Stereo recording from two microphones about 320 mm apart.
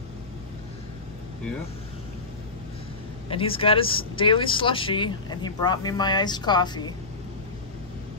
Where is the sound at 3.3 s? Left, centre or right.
Centre.